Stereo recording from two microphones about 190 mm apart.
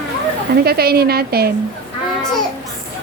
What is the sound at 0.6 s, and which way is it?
Speech, 55° right (ahead or behind).